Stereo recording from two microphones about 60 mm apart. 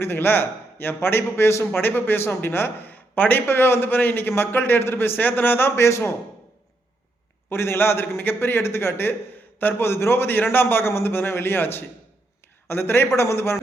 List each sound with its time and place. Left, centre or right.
0.0 s a man's voice: left
7.5 s a man's voice: left